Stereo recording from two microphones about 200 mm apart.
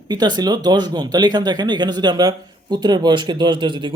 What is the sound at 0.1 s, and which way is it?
Speech, 20° right (ahead or behind).